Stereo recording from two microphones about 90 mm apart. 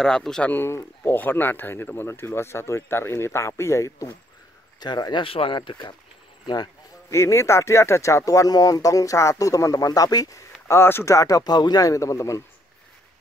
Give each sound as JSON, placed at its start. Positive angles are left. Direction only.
{"t": 0.0, "sound": "speech", "side_deg": 5}
{"t": 0.5, "sound": "speech", "side_deg": 30}
{"t": 4.7, "sound": "speech", "side_deg": 50}
{"t": 5.2, "sound": "speech", "side_deg": 85}
{"t": 5.6, "sound": "speech", "side_deg": 60}
{"t": 7.1, "sound": "speech", "side_deg": 35}
{"t": 10.7, "sound": "speech", "side_deg": 25}